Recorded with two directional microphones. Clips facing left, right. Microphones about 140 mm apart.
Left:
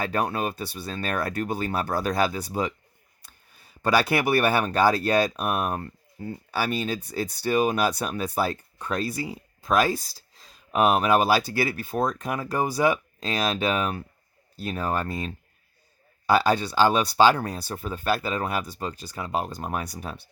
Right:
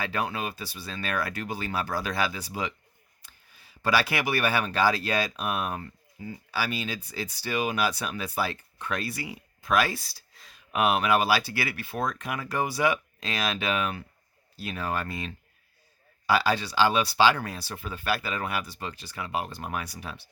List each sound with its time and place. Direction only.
0.0 s speech: 45° left (ahead or behind)